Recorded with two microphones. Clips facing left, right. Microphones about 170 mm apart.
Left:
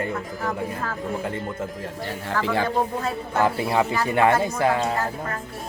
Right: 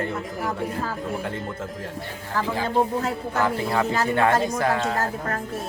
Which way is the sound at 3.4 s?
15° left (ahead or behind).